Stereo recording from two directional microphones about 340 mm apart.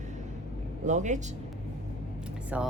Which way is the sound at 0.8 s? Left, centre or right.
Right.